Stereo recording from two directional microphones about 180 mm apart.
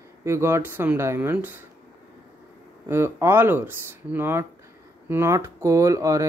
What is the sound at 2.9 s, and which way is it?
Speech, 15° right (ahead or behind).